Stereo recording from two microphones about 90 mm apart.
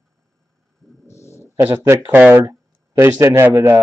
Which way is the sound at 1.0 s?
30° left (ahead or behind).